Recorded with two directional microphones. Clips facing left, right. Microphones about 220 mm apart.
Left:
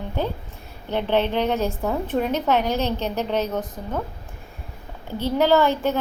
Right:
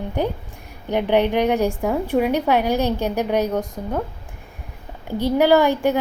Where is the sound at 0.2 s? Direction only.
15° right (ahead or behind).